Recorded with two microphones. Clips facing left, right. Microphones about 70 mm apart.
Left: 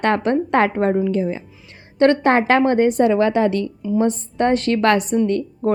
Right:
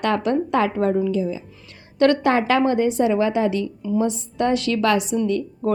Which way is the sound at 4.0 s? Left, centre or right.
Left.